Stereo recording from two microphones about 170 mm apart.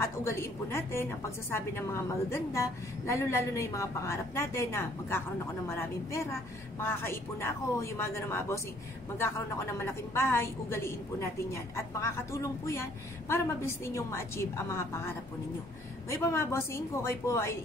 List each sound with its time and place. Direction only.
0.0 s a woman's voice: 15° left (ahead or behind)